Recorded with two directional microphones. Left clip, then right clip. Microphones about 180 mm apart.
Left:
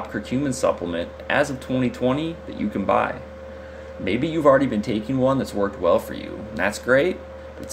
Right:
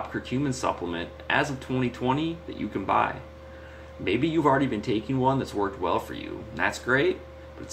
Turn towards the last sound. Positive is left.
turn(degrees=45)  # may be behind; listen again after turning